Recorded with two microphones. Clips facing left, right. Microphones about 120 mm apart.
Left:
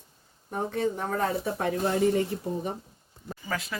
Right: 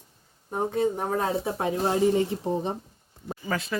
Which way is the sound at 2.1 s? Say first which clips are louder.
Right 2 dB; 20° right (ahead or behind).